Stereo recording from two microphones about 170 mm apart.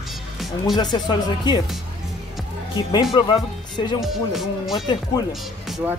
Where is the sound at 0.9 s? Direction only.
25° left (ahead or behind).